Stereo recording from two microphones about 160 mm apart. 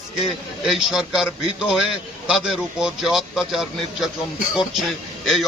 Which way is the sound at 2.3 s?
5° right (ahead or behind).